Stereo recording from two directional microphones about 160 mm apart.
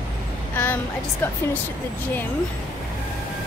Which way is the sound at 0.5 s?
15° left (ahead or behind).